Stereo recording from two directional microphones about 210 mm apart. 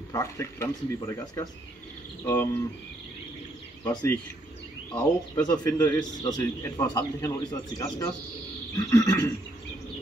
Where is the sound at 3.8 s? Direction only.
15° left (ahead or behind).